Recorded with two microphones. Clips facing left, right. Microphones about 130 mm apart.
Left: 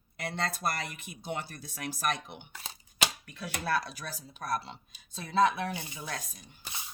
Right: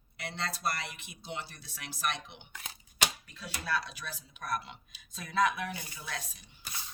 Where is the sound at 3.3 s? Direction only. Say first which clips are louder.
Left 6 dB; 60° left (ahead or behind); by 6.0 s 30° left (ahead or behind).